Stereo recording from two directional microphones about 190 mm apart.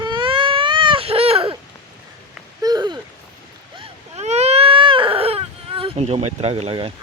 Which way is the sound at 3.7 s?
35° right (ahead or behind).